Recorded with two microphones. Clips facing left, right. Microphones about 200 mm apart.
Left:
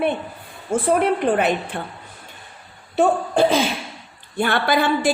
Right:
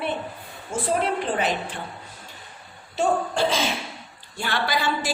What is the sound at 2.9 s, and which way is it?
A woman's voice, 55° left (ahead or behind).